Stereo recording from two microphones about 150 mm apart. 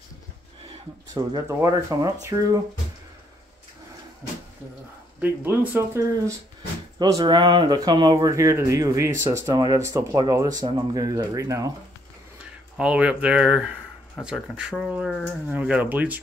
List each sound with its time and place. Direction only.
1.0 s speech: 25° right (ahead or behind)
5.2 s speech: 10° right (ahead or behind)
12.7 s speech: 5° right (ahead or behind)